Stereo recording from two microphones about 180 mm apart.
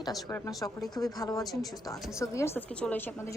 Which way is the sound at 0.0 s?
20° left (ahead or behind).